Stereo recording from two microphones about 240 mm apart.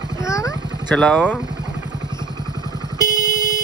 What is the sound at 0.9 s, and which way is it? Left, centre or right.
Speech, centre.